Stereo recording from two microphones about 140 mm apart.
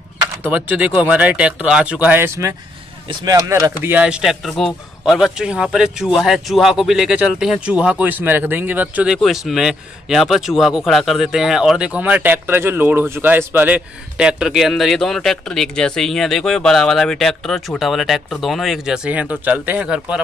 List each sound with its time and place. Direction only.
0.5 s speech: 10° right (ahead or behind)
4.0 s a man's voice: 5° right (ahead or behind)